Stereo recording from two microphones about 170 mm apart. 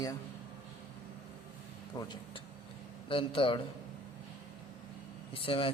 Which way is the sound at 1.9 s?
25° left (ahead or behind).